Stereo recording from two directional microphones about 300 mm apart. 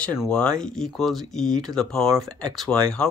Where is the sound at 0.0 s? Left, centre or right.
Centre.